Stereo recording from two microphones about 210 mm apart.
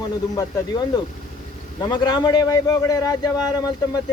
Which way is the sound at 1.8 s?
20° left (ahead or behind).